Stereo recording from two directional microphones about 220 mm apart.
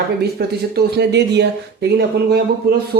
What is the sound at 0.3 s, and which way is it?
Speech, 50° right (ahead or behind).